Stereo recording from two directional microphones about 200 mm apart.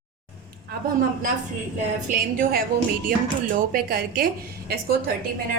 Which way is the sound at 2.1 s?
45° right (ahead or behind).